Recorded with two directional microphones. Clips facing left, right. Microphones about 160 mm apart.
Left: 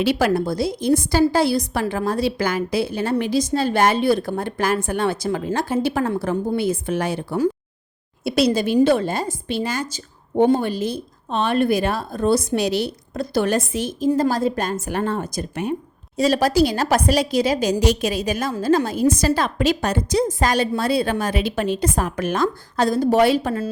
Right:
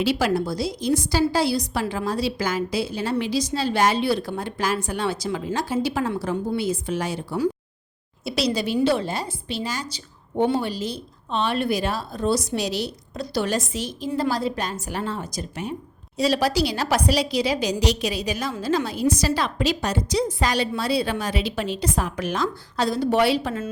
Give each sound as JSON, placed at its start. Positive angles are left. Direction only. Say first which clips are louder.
{"t": 0.0, "sound": "a woman's voice", "louder": "left 3 dB", "side_deg": 55}